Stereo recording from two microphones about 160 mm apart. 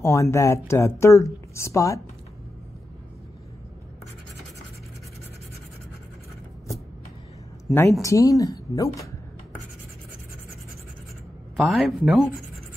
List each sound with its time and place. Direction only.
0.0 s speech: 20° left (ahead or behind)
7.7 s a woman's voice: centre (ahead or behind)
8.0 s a woman's voice: 20° left (ahead or behind)
11.5 s speech: centre (ahead or behind)